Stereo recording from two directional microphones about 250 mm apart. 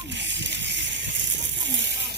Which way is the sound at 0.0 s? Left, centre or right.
Right.